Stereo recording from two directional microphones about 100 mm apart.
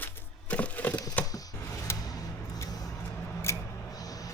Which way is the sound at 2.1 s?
40° left (ahead or behind).